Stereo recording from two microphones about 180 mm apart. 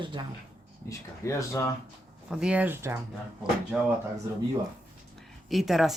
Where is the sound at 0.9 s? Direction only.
15° left (ahead or behind).